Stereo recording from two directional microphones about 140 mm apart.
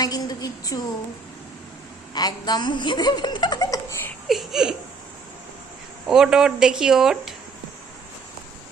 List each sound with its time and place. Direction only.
0.0 s a woman's voice: 25° left (ahead or behind)
2.1 s speech: 30° left (ahead or behind)
4.3 s speech: centre (ahead or behind)
6.1 s speech: 5° right (ahead or behind)